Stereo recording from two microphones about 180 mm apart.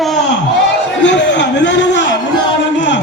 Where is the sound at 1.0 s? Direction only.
90° left.